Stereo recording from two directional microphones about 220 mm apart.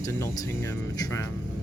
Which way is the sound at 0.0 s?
15° left (ahead or behind).